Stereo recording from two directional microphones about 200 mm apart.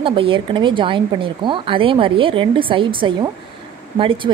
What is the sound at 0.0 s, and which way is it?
A woman's voice, 25° right (ahead or behind).